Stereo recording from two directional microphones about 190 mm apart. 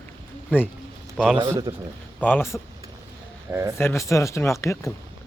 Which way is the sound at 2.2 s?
10° left (ahead or behind).